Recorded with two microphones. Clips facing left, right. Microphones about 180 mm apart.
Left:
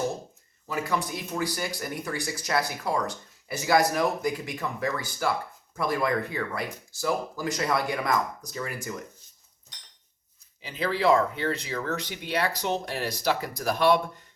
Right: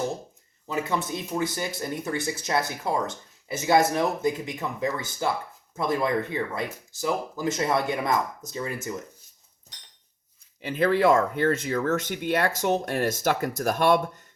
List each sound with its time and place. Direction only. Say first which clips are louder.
0.7 s speech: right 1 dB; 20° right (ahead or behind)
10.6 s speech: right 5 dB; 55° right (ahead or behind)